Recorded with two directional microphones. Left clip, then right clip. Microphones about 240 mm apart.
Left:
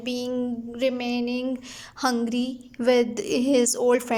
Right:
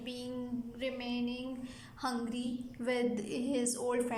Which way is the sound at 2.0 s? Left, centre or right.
Left.